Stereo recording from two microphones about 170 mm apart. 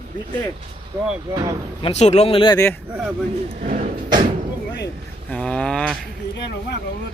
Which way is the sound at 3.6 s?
45° right (ahead or behind).